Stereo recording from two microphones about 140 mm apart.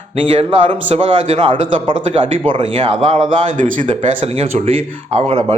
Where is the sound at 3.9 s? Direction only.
50° right (ahead or behind).